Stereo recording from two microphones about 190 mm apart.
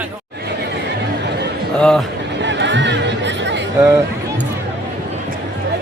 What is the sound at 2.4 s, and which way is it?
Chatter, 70° right (ahead or behind).